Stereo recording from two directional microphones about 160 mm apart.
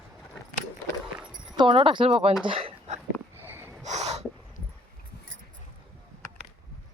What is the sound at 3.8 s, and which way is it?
Snort, 45° right (ahead or behind).